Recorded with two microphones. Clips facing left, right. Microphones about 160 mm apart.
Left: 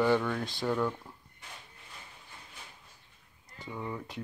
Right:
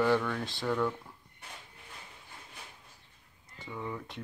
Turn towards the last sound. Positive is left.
turn(degrees=5)  # may be behind; listen again after turning